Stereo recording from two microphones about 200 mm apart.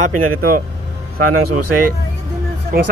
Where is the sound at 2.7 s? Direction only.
45° right (ahead or behind).